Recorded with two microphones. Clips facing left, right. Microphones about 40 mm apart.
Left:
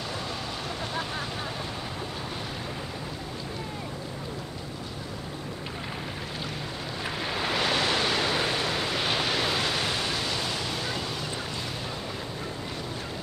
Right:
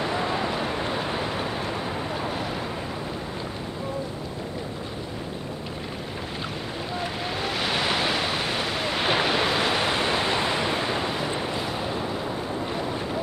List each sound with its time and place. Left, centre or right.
0.0 s vehicle: right
7.3 s waves: centre
7.7 s waves: centre